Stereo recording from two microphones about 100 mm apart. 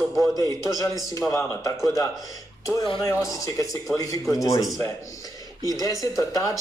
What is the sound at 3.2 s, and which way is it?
Speech, 35° left (ahead or behind).